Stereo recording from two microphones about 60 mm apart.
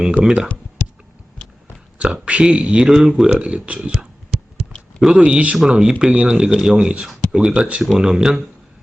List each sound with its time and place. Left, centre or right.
0.2 s speech: centre
2.0 s speech: centre
3.2 s speech: right